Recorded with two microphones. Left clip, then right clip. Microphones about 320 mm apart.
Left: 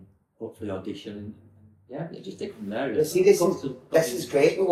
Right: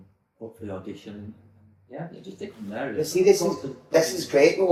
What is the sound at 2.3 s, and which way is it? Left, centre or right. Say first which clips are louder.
Speech: left 2 dB; centre.